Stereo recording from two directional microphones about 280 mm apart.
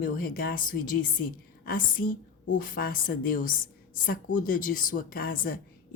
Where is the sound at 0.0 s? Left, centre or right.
Left.